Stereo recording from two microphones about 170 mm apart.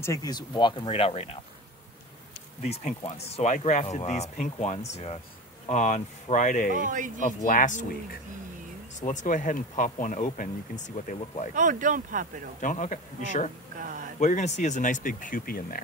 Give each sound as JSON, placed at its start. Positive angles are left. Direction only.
{"t": 0.0, "sound": "speech", "side_deg": 20}
{"t": 2.6, "sound": "speech", "side_deg": 40}
{"t": 6.7, "sound": "speech", "side_deg": -50}
{"t": 7.2, "sound": "speech", "side_deg": 50}
{"t": 9.0, "sound": "speech", "side_deg": 50}
{"t": 11.5, "sound": "speech", "side_deg": -50}
{"t": 12.5, "sound": "speech", "side_deg": 50}
{"t": 13.7, "sound": "a sound", "side_deg": -50}
{"t": 14.2, "sound": "speech", "side_deg": 45}